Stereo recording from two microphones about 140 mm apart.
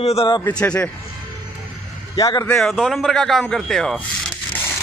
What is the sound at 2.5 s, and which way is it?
A man's voice, centre (ahead or behind).